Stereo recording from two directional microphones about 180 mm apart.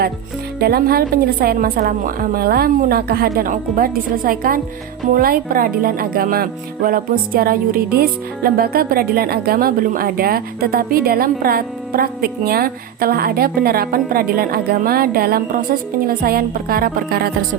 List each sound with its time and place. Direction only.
0.6 s speech: 60° right (ahead or behind)